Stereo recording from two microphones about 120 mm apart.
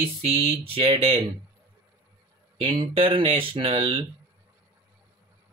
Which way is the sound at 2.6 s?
50° right (ahead or behind).